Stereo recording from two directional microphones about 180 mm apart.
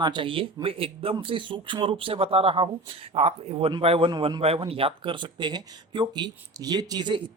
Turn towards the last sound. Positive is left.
turn(degrees=-25)  # may be behind; listen again after turning